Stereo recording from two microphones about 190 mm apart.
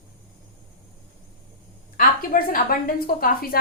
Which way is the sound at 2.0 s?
50° left (ahead or behind).